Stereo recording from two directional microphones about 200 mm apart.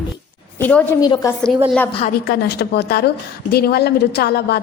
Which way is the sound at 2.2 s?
55° left (ahead or behind).